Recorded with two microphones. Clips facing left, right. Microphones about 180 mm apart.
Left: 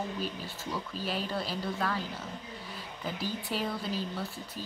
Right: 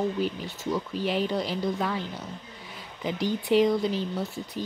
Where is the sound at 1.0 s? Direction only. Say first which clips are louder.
Right 6 dB; 20° right (ahead or behind).